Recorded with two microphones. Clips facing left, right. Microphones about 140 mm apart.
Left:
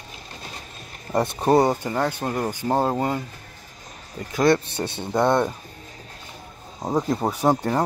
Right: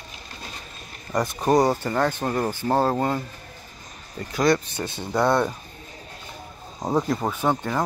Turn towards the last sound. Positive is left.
turn(degrees=35)  # may be behind; listen again after turning